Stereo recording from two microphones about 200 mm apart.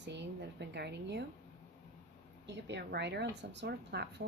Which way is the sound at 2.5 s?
60° right (ahead or behind).